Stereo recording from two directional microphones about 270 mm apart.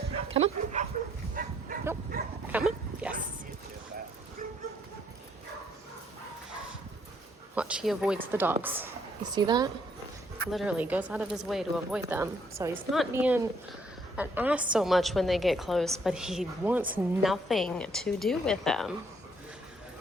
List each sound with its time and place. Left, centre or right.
0.3 s dog: right
1.4 s livestock: right
2.1 s dog: right
2.5 s dog: centre
7.5 s a sound: centre
8.3 s speech: centre
10.5 s a woman's voice: centre